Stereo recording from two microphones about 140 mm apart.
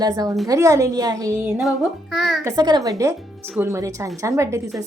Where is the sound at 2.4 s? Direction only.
30° right (ahead or behind).